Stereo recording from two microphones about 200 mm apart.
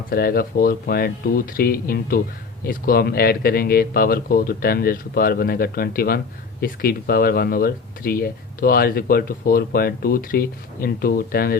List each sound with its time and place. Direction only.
0.1 s speech: 50° left (ahead or behind)